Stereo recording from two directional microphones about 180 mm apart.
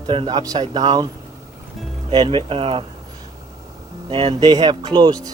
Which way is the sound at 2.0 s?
25° right (ahead or behind).